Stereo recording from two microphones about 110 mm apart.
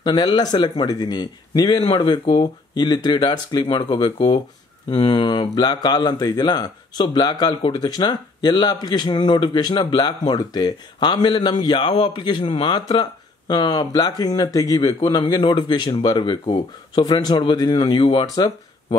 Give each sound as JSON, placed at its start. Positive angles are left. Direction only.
{"t": 0.0, "sound": "speech", "side_deg": 45}